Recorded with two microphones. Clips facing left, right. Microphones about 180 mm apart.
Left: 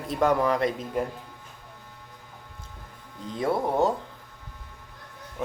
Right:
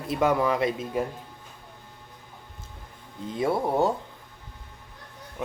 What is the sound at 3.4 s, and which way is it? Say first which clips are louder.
Speech: even; 5° right (ahead or behind).